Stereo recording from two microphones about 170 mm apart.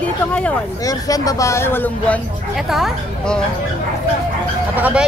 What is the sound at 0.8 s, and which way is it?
Speech, 20° left (ahead or behind).